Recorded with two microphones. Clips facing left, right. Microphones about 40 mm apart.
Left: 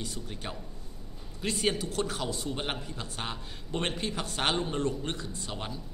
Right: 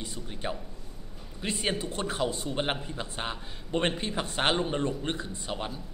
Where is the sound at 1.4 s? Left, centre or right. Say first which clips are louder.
Left 1 dB; centre.